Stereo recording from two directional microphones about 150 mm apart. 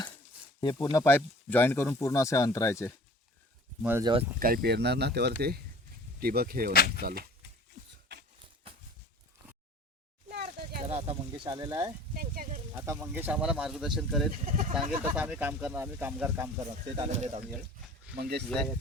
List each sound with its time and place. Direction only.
0.6 s speech: 30° left (ahead or behind)
4.0 s speech: 35° right (ahead or behind)
4.4 s speech: 80° right
6.7 s speech: 90° left
7.0 s speech: 85° right
10.2 s a sound: 80° right
10.8 s speech: 40° right (ahead or behind)
11.5 s speech: 25° right (ahead or behind)
12.1 s a sound: 75° right (ahead or behind)
12.8 s speech: 20° right (ahead or behind); by 14.3 s centre (ahead or behind)
14.4 s speech: 60° right (ahead or behind)
14.8 s speech: 10° right (ahead or behind)
16.6 s speech: 45° right (ahead or behind)
18.2 s speech: 90° right